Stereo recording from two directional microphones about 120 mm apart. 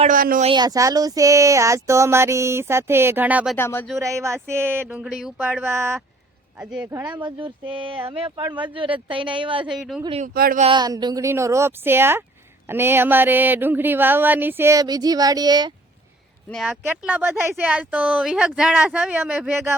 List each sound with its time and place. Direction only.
0.0 s speech: 75° right (ahead or behind)
0.5 s speech: 30° right (ahead or behind); by 3.5 s 15° right (ahead or behind)
3.5 s speech: 20° left (ahead or behind)
4.0 s speech: 25° right (ahead or behind)
4.9 s a sound: 5° right (ahead or behind)
5.6 s speech: 20° right (ahead or behind)
6.6 s speech: 5° right (ahead or behind)
7.2 s speech: 45° right (ahead or behind)
9.7 s a sound: 5° right (ahead or behind)
10.1 s speech: 80° right
10.7 s speech: 35° right (ahead or behind)
17.0 s speech: 15° right (ahead or behind)